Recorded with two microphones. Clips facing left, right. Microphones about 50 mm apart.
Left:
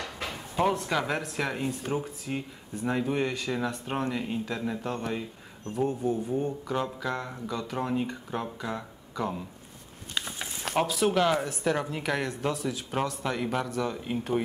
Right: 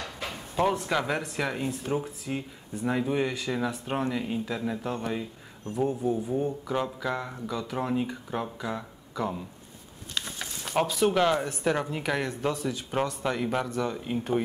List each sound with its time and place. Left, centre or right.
0.6 s speech: centre
10.1 s a sound: centre
10.8 s speech: centre